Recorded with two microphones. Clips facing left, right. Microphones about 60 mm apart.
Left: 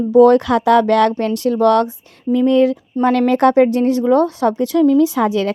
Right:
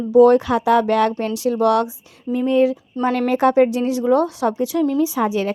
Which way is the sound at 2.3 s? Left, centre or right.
Left.